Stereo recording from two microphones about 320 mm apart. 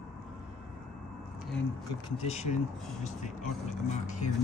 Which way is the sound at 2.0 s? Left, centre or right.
Centre.